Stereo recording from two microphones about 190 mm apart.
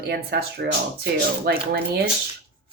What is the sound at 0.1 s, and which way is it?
Speech, 60° right (ahead or behind).